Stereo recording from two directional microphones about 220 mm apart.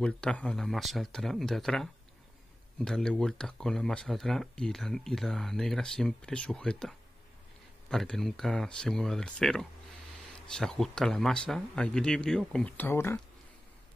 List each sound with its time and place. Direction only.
0.0 s speech: 5° left (ahead or behind)